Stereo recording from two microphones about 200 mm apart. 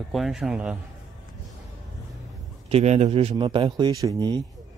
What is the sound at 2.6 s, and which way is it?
A man's voice, 30° right (ahead or behind).